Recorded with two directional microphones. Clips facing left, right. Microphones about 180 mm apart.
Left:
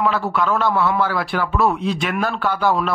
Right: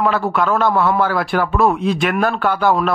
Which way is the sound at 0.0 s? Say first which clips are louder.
Right 2 dB; 50° right (ahead or behind).